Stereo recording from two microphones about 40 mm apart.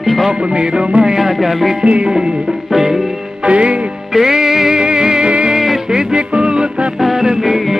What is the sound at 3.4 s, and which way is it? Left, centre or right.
Music, right.